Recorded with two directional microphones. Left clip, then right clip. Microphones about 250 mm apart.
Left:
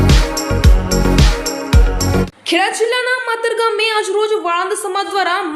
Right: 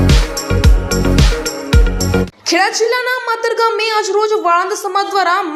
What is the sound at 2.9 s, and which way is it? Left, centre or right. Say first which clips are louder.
A woman's voice: right 1 dB; centre.